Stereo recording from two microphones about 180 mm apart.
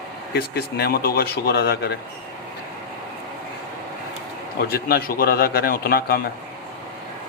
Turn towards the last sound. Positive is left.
turn(degrees=55)  # may be behind; listen again after turning